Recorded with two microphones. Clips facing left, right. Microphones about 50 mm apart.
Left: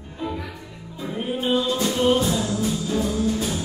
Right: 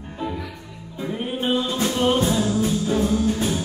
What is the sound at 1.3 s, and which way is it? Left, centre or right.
Music, right.